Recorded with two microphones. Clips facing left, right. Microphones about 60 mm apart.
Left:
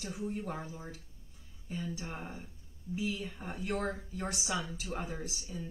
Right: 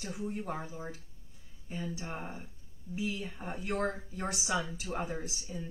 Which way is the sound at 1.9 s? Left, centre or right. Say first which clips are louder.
Right 1 dB; centre.